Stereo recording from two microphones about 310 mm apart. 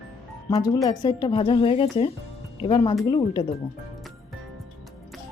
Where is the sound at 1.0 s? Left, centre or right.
Centre.